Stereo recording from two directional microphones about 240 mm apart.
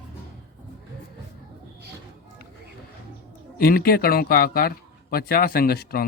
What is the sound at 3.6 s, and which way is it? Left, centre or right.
Speech, left.